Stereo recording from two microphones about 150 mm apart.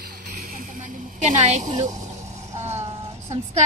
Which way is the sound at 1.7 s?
25° right (ahead or behind).